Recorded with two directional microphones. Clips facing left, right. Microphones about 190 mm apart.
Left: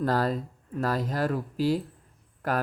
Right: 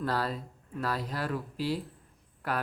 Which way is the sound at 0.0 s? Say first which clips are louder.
Left 6 dB; 45° left (ahead or behind).